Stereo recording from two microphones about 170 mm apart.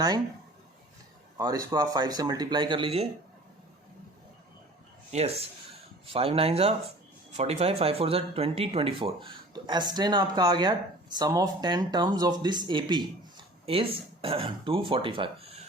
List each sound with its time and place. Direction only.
1.4 s speech: 25° right (ahead or behind)
5.1 s speech: 40° right (ahead or behind)